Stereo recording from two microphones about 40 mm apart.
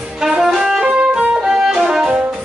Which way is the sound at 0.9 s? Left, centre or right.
Right.